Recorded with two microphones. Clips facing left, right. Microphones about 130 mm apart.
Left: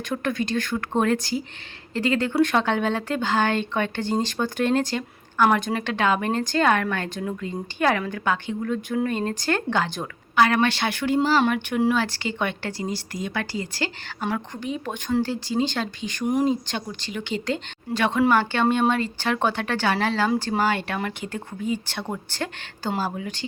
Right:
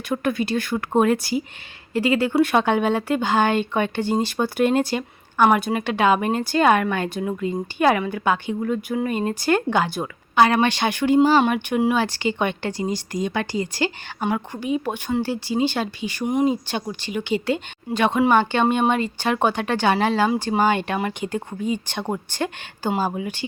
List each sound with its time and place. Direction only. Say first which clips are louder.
0.1 s speech: right 3 dB; 10° right (ahead or behind)
16.2 s speech: right 2 dB; centre (ahead or behind)
16.5 s speech: right 2 dB; 10° right (ahead or behind)
20.3 s speech: right 1 dB; 5° right (ahead or behind)
20.6 s speech: right 4 dB; 20° right (ahead or behind)